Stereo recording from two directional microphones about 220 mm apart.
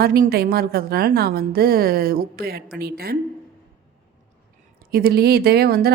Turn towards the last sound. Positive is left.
turn(degrees=-45)  # may be behind; listen again after turning